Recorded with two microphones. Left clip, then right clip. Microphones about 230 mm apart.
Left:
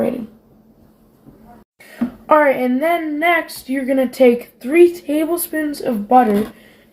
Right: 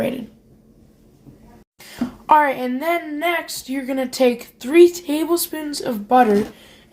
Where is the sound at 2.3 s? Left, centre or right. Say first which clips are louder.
Left 2 dB; right.